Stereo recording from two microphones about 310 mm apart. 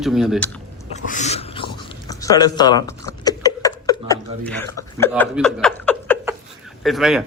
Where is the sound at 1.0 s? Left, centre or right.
Left.